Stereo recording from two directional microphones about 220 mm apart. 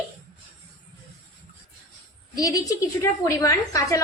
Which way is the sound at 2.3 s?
15° left (ahead or behind).